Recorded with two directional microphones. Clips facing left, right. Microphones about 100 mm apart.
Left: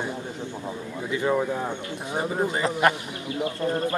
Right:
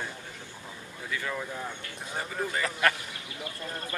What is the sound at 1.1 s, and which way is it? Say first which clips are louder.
Speech: left 10 dB; 25° left (ahead or behind).